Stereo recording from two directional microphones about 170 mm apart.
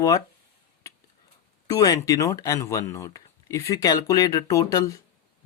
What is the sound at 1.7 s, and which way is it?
Speech, 20° left (ahead or behind).